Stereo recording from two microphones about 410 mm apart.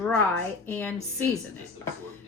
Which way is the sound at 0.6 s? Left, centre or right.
Centre.